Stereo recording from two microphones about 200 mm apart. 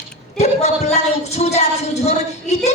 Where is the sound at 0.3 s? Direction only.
35° left (ahead or behind).